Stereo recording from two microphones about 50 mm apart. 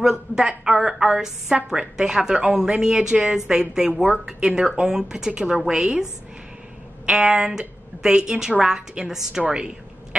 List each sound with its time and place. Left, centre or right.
0.4 s a woman's voice: centre
7.1 s a woman's voice: centre